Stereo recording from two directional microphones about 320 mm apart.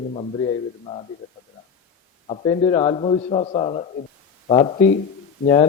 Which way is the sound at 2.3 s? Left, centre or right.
Centre.